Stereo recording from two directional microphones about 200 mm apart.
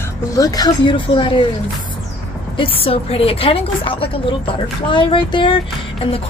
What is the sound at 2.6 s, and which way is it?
A woman's voice, 30° left (ahead or behind).